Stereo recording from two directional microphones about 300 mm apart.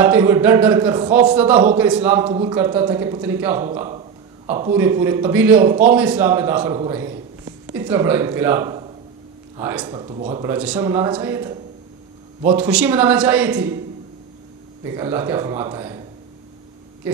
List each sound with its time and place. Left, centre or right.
0.0 s a man's voice: centre
1.3 s a man's voice: centre
2.2 s speech: centre
2.5 s a man's voice: centre
14.9 s a man's voice: centre